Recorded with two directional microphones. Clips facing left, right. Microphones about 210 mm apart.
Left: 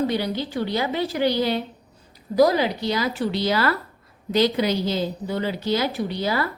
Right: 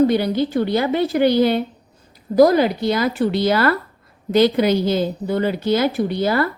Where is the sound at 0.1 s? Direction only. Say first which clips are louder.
Right 7 dB; 50° right (ahead or behind).